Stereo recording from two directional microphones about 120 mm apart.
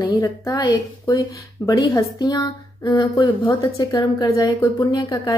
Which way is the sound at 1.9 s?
35° left (ahead or behind).